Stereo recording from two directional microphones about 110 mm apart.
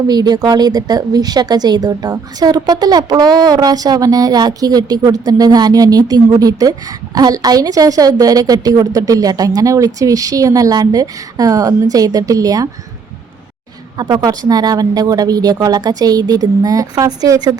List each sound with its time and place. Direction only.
0.1 s speech: 35° right (ahead or behind)
14.0 s speech: 40° right (ahead or behind)